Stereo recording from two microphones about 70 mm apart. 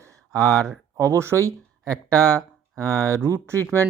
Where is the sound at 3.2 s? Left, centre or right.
Right.